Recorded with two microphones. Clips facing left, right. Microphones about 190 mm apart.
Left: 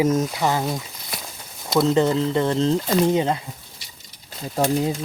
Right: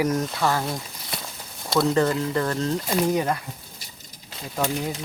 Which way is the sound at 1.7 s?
20° left (ahead or behind).